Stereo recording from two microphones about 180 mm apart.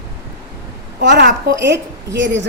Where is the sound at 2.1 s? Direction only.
80° right.